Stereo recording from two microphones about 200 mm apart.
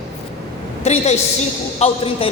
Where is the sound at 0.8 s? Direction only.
35° left (ahead or behind).